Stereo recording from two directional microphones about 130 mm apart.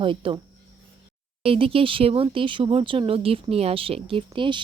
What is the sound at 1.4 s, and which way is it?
Speech, 45° right (ahead or behind).